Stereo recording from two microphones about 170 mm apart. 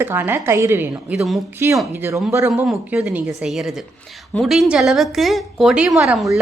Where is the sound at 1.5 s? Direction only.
15° right (ahead or behind).